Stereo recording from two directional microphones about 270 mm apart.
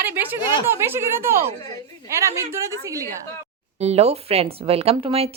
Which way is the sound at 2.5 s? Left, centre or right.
Centre.